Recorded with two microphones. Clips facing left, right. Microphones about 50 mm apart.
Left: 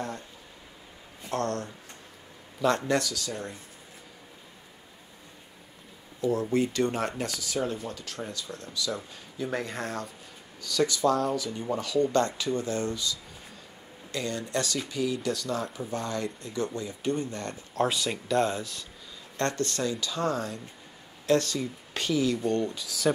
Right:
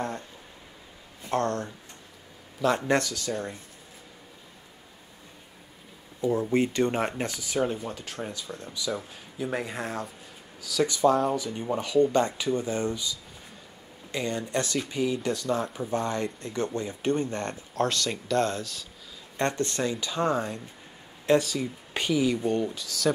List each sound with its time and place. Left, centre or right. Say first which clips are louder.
1.3 s speech: right 3 dB; right
2.6 s speech: even; centre
2.9 s speech: right 2 dB; right
6.5 s speech: right 2 dB; right; by 10.9 s centre
10.9 s speech: right 5 dB; right
17.7 s speech: even; centre
19.3 s speech: right 1 dB; right
21.4 s speech: right 1 dB; centre
22.8 s speech: even; centre